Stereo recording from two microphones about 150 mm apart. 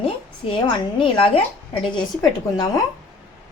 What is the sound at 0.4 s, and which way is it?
Speech, 40° left (ahead or behind).